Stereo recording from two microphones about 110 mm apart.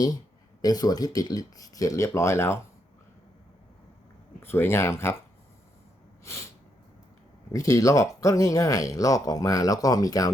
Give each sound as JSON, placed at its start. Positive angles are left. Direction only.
{"t": 0.6, "sound": "speech", "side_deg": 35}
{"t": 4.4, "sound": "speech", "side_deg": 20}
{"t": 6.3, "sound": "speech", "side_deg": 25}
{"t": 7.5, "sound": "speech", "side_deg": 30}